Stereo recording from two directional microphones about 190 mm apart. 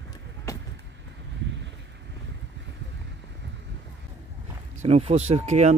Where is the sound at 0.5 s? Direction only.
15° left (ahead or behind).